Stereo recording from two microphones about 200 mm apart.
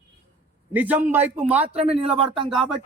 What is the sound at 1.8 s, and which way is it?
Speech, 30° right (ahead or behind).